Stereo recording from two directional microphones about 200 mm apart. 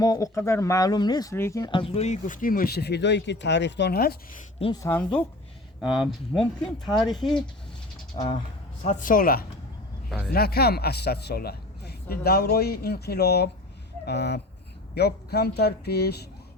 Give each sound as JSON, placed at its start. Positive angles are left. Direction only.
{"t": 0.0, "sound": "speech", "side_deg": 15}
{"t": 4.6, "sound": "speech", "side_deg": 20}
{"t": 5.8, "sound": "speech", "side_deg": 0}
{"t": 8.8, "sound": "a man's voice", "side_deg": 40}